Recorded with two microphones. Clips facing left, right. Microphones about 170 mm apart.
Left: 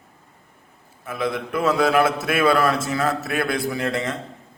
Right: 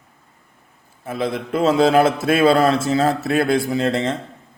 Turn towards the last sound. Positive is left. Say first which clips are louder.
# right 4 dB
turn(degrees=-30)  # may be behind; listen again after turning